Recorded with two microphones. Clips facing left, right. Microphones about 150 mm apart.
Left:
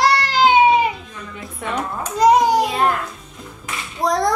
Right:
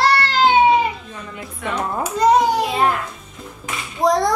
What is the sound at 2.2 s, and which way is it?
Speech, 10° left (ahead or behind).